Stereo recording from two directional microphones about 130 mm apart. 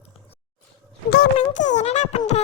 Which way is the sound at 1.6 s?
65° left (ahead or behind).